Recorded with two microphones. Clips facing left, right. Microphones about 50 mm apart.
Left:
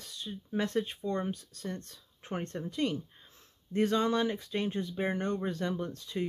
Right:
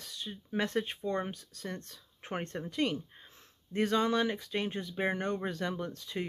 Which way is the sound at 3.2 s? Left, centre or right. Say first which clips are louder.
Right 3 dB; right.